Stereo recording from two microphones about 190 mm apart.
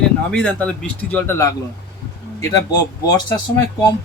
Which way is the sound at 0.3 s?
5° left (ahead or behind).